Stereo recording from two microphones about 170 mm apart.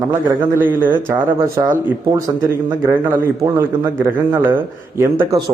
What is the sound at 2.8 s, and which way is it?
A man's voice, 15° right (ahead or behind).